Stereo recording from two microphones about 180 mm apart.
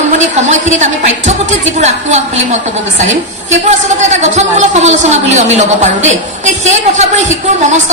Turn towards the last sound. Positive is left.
turn(degrees=-40)  # may be behind; listen again after turning